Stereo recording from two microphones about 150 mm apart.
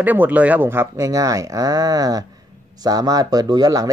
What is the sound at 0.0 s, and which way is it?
Speech, 10° right (ahead or behind).